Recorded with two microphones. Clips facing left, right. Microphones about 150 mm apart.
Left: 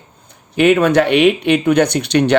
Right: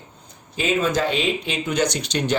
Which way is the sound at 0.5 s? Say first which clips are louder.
Left 10 dB; 65° left (ahead or behind).